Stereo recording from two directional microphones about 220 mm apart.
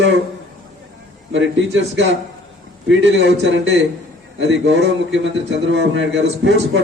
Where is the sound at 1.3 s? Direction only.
55° right (ahead or behind).